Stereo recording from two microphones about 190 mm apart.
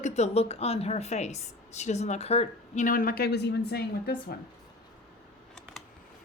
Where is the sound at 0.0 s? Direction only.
35° left (ahead or behind); by 4.4 s 55° left (ahead or behind).